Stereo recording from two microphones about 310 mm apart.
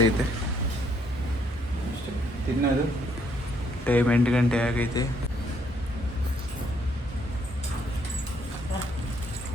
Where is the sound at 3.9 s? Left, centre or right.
Centre.